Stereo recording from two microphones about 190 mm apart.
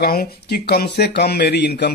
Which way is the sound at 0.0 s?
55° left (ahead or behind).